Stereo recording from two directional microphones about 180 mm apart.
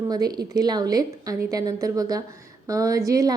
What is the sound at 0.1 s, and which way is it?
A woman's voice, 20° right (ahead or behind).